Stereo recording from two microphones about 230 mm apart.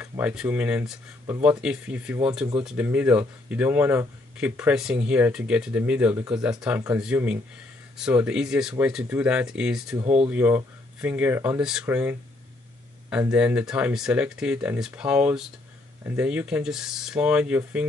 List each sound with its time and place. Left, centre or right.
0.2 s speech: centre
10.0 s speech: right
10.3 s speech: centre